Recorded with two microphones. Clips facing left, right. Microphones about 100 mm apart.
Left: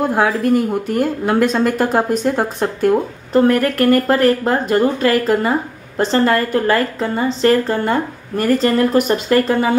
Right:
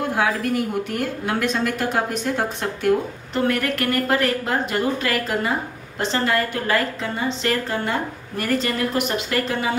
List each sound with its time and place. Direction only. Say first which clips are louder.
0.1 s a woman's voice: left 7 dB; 40° left (ahead or behind)